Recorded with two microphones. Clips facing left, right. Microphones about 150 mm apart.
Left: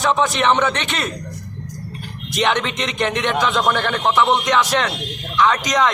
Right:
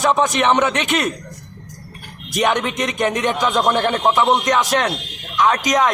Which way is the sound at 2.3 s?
10° right (ahead or behind).